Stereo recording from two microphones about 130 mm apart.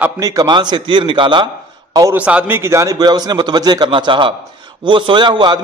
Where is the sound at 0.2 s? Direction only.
30° right (ahead or behind).